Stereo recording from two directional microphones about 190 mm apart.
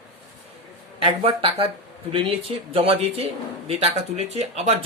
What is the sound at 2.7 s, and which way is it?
Speech, 30° right (ahead or behind).